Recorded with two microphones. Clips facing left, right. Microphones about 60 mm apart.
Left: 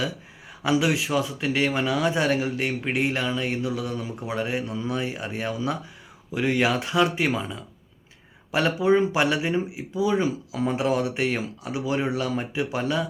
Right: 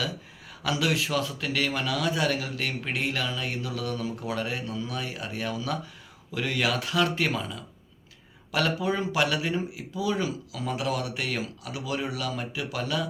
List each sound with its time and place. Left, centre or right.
0.6 s speech: left